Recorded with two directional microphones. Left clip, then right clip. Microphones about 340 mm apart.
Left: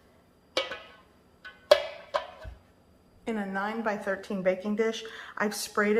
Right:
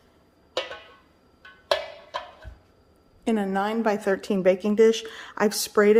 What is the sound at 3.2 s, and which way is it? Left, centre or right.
A woman's voice, right.